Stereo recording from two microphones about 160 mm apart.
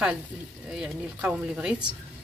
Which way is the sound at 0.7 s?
5° right (ahead or behind).